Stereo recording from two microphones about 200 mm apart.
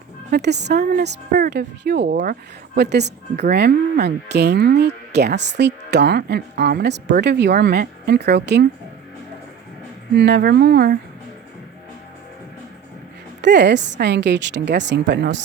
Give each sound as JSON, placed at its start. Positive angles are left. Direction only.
{"t": 0.3, "sound": "a woman's voice", "side_deg": -55}
{"t": 10.2, "sound": "a woman's voice", "side_deg": -60}
{"t": 13.4, "sound": "a woman's voice", "side_deg": -60}